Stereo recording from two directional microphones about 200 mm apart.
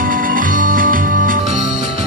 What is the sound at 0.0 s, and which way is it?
Music, 45° right (ahead or behind).